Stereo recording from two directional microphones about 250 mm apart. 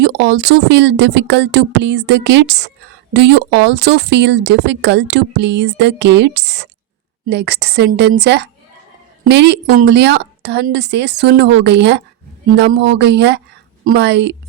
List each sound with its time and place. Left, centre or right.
0.0 s a woman's voice: right